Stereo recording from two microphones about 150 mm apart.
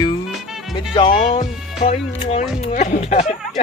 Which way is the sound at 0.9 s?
35° left (ahead or behind).